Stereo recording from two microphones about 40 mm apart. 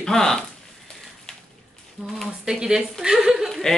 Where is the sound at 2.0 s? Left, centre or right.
Centre.